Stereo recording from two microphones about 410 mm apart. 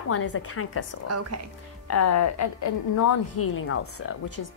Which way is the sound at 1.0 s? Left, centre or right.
Right.